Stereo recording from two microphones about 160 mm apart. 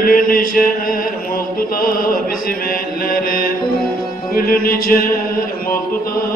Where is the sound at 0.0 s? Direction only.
60° left (ahead or behind).